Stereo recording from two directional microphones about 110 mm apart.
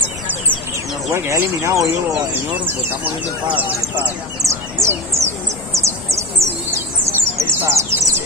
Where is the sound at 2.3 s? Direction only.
15° right (ahead or behind).